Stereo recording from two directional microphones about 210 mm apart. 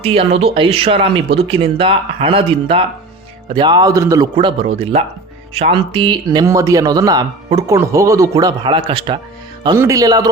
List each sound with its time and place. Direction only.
0.0 s speech: 30° right (ahead or behind)